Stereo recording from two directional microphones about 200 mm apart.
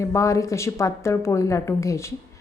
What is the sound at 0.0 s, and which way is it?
A woman's voice, 15° left (ahead or behind).